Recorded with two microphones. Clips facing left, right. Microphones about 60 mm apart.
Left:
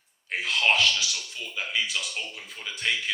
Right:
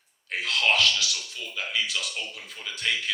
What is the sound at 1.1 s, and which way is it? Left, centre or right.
Speech, centre.